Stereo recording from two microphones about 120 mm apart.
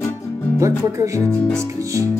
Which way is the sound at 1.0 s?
25° right (ahead or behind).